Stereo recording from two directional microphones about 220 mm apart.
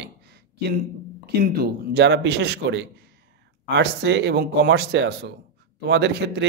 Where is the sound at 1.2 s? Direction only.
45° right (ahead or behind).